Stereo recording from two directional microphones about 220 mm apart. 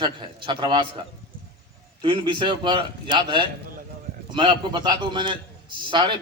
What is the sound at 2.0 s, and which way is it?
A man's voice, 25° right (ahead or behind).